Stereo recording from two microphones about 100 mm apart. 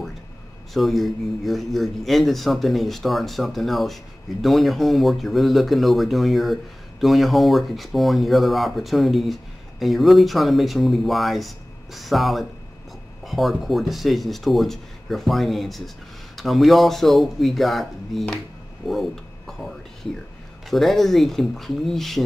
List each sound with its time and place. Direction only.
0.7 s speech: centre (ahead or behind)
18.9 s mechanisms: centre (ahead or behind)
20.7 s speech: centre (ahead or behind)